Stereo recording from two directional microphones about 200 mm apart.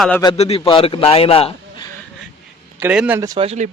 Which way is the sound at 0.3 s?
30° left (ahead or behind).